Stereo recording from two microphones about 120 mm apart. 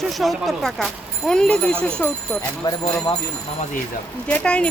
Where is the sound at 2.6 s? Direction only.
35° left (ahead or behind).